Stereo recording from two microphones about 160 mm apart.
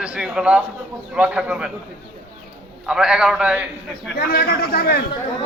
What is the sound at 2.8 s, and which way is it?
A man's voice, 5° right (ahead or behind).